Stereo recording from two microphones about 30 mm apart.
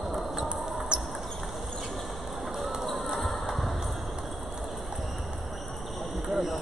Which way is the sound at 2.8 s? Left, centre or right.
Centre.